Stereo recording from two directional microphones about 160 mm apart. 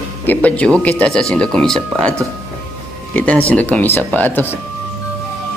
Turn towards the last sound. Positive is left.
turn(degrees=10)  # may be behind; listen again after turning